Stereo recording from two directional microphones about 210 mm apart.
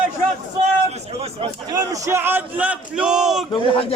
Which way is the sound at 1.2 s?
25° right (ahead or behind).